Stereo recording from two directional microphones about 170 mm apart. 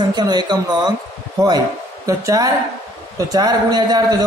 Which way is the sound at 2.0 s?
20° right (ahead or behind).